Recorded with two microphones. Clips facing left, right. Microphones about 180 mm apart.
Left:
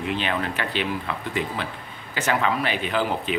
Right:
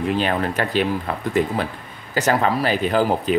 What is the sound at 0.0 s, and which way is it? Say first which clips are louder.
Speech: right 5 dB; 40° right (ahead or behind).